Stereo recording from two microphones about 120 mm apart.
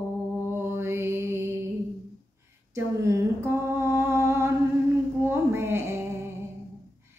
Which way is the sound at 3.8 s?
20° right (ahead or behind).